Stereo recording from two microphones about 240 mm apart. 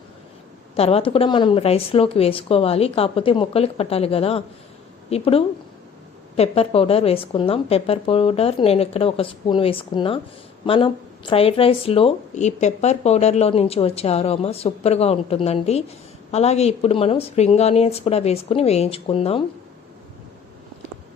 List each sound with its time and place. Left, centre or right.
0.8 s a woman's voice: left